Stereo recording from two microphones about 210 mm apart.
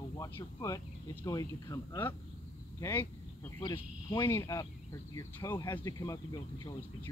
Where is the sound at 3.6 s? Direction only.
20° left (ahead or behind).